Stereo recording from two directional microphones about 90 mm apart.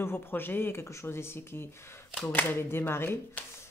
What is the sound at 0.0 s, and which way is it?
Speech, 25° left (ahead or behind).